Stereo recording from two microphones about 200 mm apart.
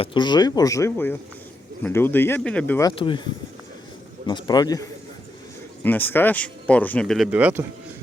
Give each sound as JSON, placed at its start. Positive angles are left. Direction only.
{"t": 0.0, "sound": "speech", "side_deg": 25}
{"t": 4.3, "sound": "speech", "side_deg": 20}